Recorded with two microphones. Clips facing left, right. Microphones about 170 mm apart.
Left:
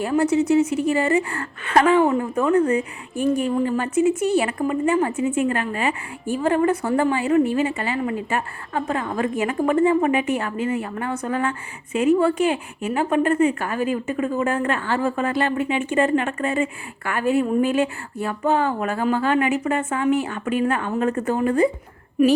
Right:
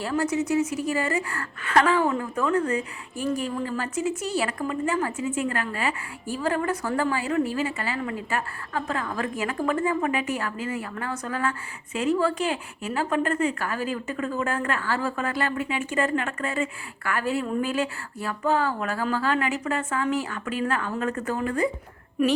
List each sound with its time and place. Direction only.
0.0 s a woman's voice: 20° left (ahead or behind)
0.3 s a woman's voice: 30° left (ahead or behind)